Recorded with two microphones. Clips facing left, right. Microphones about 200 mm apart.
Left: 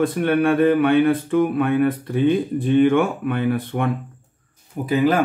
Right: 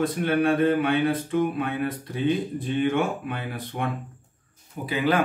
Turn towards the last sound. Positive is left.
turn(degrees=45)  # may be behind; listen again after turning